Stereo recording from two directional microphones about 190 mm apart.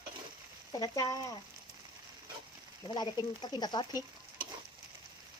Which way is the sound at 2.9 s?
20° left (ahead or behind).